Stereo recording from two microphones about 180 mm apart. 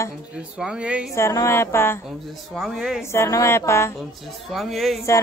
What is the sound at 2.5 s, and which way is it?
Speech, centre (ahead or behind).